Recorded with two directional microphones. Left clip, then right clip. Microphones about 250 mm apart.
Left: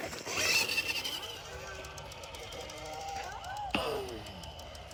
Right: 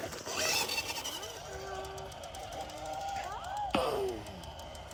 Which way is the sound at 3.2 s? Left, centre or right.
Centre.